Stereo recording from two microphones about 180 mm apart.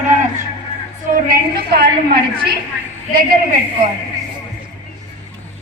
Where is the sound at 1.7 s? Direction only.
65° right (ahead or behind).